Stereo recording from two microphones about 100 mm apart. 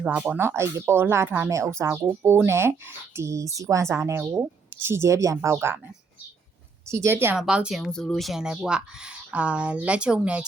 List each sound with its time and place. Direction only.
0.0 s speech: 10° right (ahead or behind)
0.3 s a woman's voice: 25° right (ahead or behind)
6.8 s speech: 30° right (ahead or behind)
7.3 s speech: 10° right (ahead or behind)
7.8 s speech: 5° left (ahead or behind); by 10.4 s 10° right (ahead or behind)